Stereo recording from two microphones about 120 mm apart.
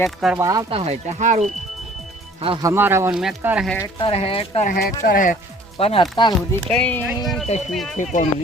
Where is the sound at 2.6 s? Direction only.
20° right (ahead or behind).